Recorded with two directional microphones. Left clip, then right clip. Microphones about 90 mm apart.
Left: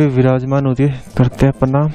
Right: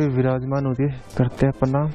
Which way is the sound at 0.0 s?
35° left (ahead or behind).